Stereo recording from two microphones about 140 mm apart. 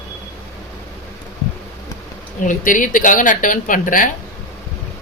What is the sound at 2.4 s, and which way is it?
Speech, 70° left (ahead or behind).